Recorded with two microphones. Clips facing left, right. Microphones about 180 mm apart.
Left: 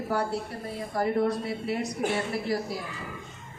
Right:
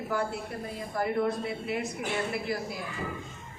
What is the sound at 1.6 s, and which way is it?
Speech, 40° left (ahead or behind).